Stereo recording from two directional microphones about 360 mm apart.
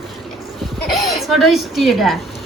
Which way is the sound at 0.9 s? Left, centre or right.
Centre.